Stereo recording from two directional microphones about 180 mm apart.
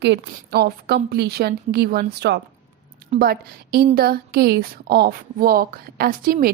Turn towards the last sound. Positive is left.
turn(degrees=-55)  # may be behind; listen again after turning